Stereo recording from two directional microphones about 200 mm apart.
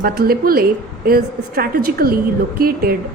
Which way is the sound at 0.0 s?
45° right (ahead or behind).